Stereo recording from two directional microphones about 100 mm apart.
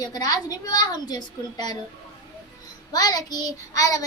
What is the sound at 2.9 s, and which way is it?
A child's voice, 40° left (ahead or behind).